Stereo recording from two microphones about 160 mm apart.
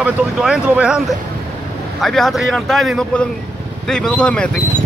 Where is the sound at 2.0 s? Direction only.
Centre (ahead or behind).